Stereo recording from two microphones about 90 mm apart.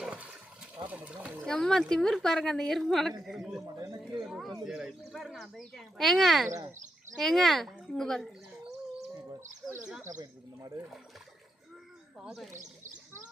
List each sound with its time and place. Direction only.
0.0 s water: 10° right (ahead or behind)
0.9 s a sound: 15° right (ahead or behind)
1.5 s a woman's voice: 5° left (ahead or behind)
4.0 s a sound: 5° right (ahead or behind)
4.6 s a woman's voice: 5° right (ahead or behind)
6.5 s speech: 35° right (ahead or behind)
7.2 s a woman's voice: centre (ahead or behind)
9.4 s speech: 35° right (ahead or behind)